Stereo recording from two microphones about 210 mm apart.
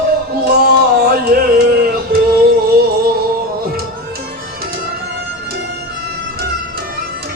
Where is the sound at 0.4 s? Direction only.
45° right (ahead or behind).